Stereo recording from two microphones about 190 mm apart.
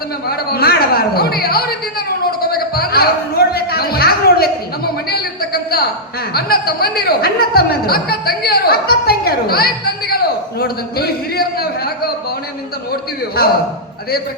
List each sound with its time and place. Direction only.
0.3 s a sound: 55° left (ahead or behind)
2.4 s music: 55° left (ahead or behind)
6.3 s speech: 55° left (ahead or behind)
12.9 s speech: 55° left (ahead or behind)